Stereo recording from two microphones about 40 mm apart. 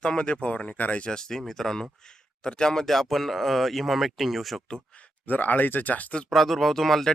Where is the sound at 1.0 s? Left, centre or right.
Centre.